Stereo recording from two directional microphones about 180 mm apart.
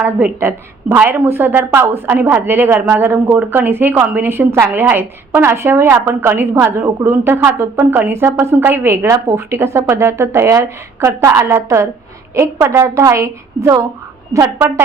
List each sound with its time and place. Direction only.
0.0 s a woman's voice: 10° right (ahead or behind)